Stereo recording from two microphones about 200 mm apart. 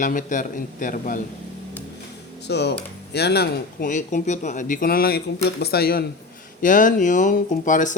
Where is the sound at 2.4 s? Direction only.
55° left (ahead or behind).